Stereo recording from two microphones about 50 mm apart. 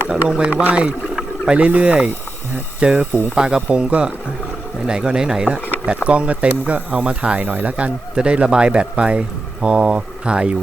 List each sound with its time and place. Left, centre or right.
0.1 s speech: centre
0.5 s a man's voice: right
3.3 s a man's voice: centre
5.8 s a man's voice: right
7.4 s speech: right
7.7 s a man's voice: right